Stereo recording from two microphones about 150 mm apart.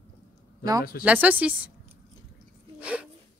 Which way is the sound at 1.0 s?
10° right (ahead or behind).